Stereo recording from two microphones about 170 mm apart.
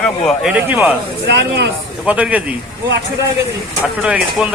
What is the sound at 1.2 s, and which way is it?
Speech, 85° right.